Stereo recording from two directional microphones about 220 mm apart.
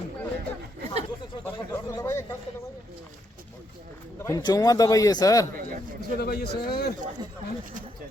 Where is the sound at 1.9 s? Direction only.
15° left (ahead or behind).